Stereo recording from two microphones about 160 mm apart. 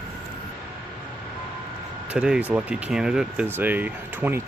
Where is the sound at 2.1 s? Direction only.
5° right (ahead or behind).